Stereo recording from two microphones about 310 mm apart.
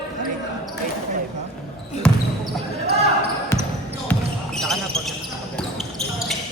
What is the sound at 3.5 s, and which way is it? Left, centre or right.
Basketball bounce, centre.